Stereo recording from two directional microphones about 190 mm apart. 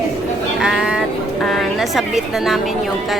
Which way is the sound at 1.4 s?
Centre (ahead or behind).